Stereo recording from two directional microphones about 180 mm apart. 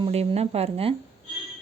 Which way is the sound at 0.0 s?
30° right (ahead or behind).